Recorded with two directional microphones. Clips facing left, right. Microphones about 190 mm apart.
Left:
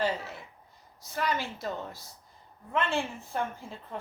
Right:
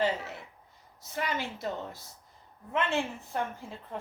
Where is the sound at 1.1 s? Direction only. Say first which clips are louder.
Left 2 dB; 20° right (ahead or behind).